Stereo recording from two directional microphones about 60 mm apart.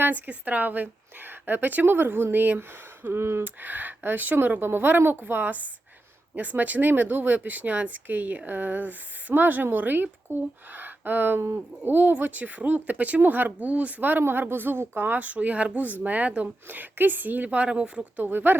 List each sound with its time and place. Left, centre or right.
0.0 s speech: right
3.4 s speech: right
10.7 s a sound: right
11.8 s speech: right
18.2 s speech: right